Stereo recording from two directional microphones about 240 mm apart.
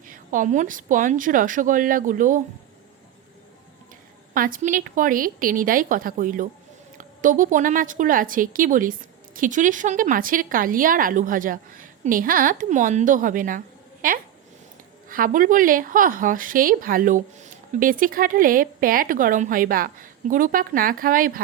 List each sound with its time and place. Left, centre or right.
0.1 s a woman's voice: right
4.4 s a woman's voice: right